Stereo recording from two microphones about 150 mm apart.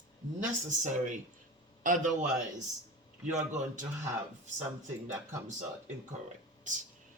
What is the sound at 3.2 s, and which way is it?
Speech, 55° right (ahead or behind).